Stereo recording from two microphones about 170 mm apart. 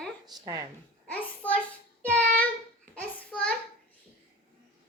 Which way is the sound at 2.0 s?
10° left (ahead or behind).